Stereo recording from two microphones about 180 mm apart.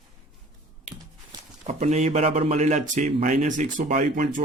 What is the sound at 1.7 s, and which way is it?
A man's voice, 40° right (ahead or behind).